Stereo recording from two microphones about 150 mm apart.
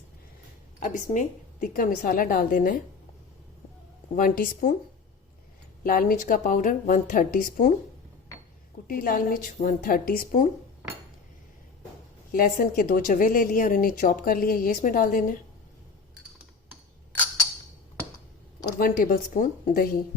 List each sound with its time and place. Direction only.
0.8 s speech: 60° left (ahead or behind)
4.1 s speech: 70° left (ahead or behind)
5.8 s speech: 70° left (ahead or behind)
8.9 s speech: 70° left (ahead or behind)
12.3 s speech: 65° left (ahead or behind)
18.8 s speech: 70° left (ahead or behind)